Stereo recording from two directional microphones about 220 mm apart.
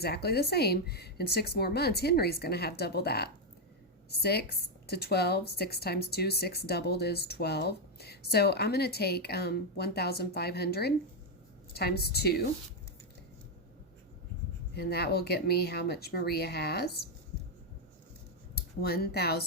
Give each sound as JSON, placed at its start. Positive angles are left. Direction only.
{"t": 0.0, "sound": "speech", "side_deg": 45}
{"t": 14.8, "sound": "speech", "side_deg": 45}
{"t": 18.5, "sound": "speech", "side_deg": 45}